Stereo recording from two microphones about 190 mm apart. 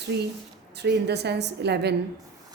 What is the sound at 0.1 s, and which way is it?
A woman's voice, 60° right (ahead or behind).